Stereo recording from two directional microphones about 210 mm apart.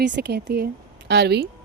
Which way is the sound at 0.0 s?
50° right (ahead or behind).